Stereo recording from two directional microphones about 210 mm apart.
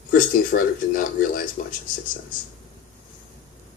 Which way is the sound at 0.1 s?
40° left (ahead or behind).